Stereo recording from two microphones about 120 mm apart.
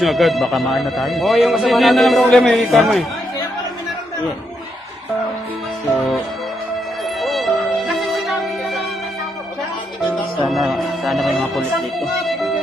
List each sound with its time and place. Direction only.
0.0 s a man's voice: centre (ahead or behind)
5.9 s music: centre (ahead or behind)
7.2 s music: centre (ahead or behind)
10.5 s music: centre (ahead or behind)